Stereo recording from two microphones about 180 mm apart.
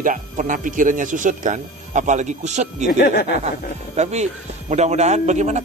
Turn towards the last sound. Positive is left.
turn(degrees=-40)  # may be behind; listen again after turning